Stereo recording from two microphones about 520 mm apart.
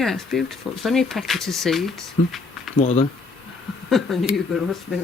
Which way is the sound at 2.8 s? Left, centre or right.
Centre.